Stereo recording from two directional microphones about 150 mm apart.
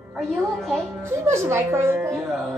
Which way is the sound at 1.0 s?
20° right (ahead or behind).